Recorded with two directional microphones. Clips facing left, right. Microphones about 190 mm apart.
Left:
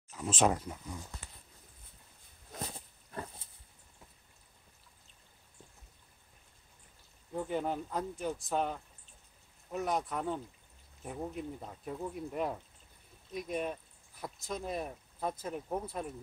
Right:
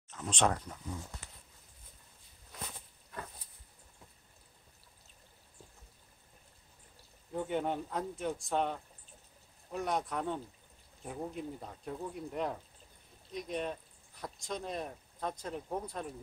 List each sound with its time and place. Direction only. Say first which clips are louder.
0.1 s speech: left 2 dB; 5° left (ahead or behind)
2.6 s a sound: left 4 dB; 30° left (ahead or behind)
7.3 s speech: even; centre (ahead or behind)